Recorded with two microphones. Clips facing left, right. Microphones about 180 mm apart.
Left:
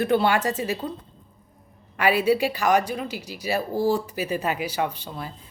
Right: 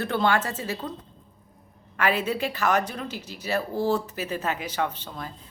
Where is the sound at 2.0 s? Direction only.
10° left (ahead or behind).